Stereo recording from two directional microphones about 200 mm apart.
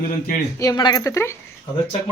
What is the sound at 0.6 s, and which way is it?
Speech, 20° left (ahead or behind).